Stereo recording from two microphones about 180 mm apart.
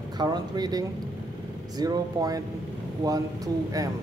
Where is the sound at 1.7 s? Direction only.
20° right (ahead or behind).